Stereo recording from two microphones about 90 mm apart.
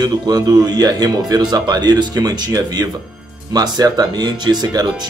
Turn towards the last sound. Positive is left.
turn(degrees=-50)  # may be behind; listen again after turning